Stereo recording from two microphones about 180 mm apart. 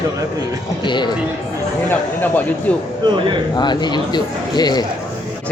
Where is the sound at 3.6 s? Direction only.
25° left (ahead or behind).